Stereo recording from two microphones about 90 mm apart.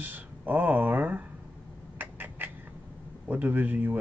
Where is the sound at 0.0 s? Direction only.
20° right (ahead or behind).